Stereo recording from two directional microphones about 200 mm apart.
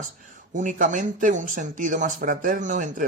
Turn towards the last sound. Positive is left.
turn(degrees=-40)  # may be behind; listen again after turning